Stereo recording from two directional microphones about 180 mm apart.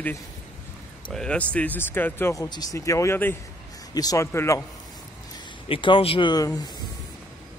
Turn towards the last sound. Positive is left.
turn(degrees=20)  # may be behind; listen again after turning